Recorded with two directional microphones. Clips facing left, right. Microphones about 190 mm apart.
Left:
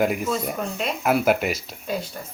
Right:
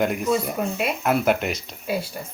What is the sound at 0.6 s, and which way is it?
Speech, 10° right (ahead or behind).